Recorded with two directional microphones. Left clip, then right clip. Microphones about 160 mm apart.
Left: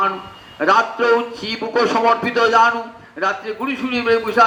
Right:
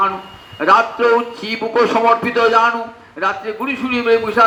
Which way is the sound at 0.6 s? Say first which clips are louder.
Right 3 dB; 25° right (ahead or behind).